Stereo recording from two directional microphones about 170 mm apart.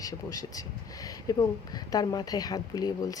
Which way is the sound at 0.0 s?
20° left (ahead or behind).